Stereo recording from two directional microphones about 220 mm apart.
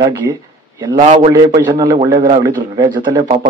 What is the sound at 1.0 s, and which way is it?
A man's voice, 25° right (ahead or behind).